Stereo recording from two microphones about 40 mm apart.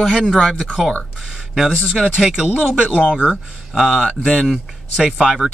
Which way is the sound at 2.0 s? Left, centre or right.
Centre.